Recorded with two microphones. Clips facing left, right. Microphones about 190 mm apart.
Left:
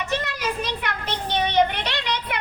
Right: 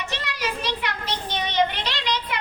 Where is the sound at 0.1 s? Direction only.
50° left (ahead or behind).